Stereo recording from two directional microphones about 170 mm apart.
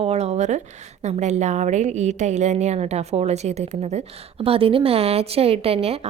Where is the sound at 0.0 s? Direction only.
40° right (ahead or behind).